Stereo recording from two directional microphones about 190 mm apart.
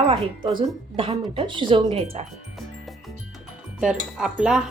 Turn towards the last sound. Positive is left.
turn(degrees=-5)  # may be behind; listen again after turning